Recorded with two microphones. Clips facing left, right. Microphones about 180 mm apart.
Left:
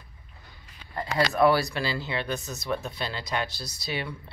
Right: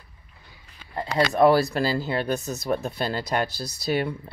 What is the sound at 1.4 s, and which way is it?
Speech, 45° right (ahead or behind).